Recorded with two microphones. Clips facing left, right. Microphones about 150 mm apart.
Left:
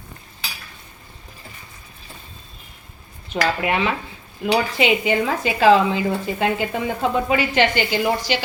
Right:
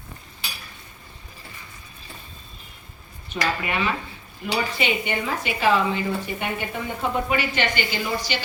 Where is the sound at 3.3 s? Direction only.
90° left.